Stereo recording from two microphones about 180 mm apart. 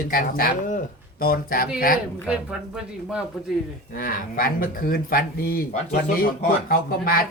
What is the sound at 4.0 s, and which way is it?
Speech, 50° left (ahead or behind).